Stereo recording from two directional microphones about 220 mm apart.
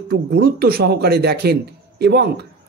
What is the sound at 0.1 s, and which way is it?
A man's voice, 45° right (ahead or behind).